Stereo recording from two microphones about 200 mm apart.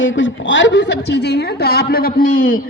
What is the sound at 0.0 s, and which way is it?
A woman's voice, 70° left (ahead or behind).